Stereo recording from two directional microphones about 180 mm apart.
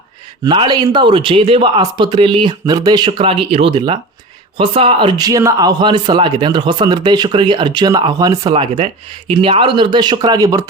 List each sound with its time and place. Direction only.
0.4 s speech: 25° right (ahead or behind)